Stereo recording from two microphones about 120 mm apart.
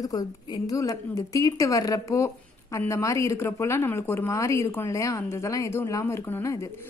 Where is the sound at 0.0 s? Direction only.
30° left (ahead or behind).